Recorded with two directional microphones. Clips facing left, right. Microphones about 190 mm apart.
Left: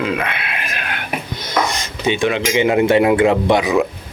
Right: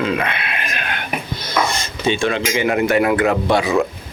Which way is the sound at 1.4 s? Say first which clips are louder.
Left 1 dB; 20° left (ahead or behind).